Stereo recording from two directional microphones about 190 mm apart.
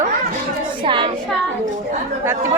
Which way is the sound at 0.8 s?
25° right (ahead or behind).